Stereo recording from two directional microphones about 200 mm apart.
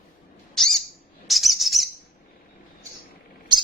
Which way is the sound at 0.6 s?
Centre (ahead or behind).